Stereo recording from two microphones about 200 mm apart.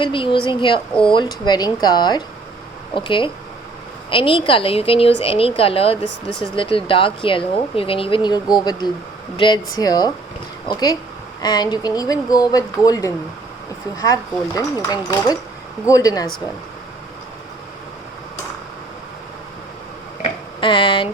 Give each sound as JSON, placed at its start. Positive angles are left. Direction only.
{"t": 0.0, "sound": "speech", "side_deg": 25}
{"t": 14.5, "sound": "speech", "side_deg": 15}
{"t": 20.2, "sound": "a sound", "side_deg": 25}